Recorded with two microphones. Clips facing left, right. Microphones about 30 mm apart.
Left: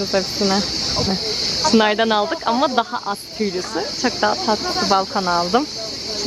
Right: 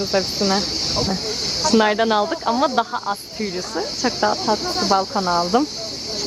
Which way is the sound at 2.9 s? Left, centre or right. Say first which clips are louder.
Left 1 dB; centre.